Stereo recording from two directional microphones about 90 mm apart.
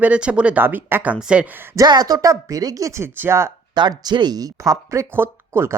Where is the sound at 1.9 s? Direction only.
45° right (ahead or behind); by 3.5 s 30° right (ahead or behind).